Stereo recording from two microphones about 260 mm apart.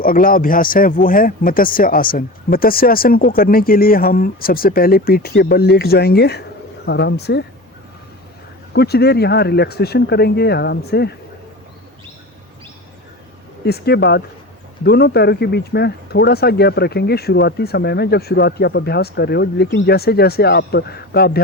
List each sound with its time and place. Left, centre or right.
0.0 s speech: left
8.7 s speech: left
13.7 s speech: left